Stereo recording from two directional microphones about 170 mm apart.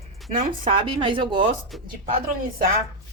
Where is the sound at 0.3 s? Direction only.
45° right (ahead or behind).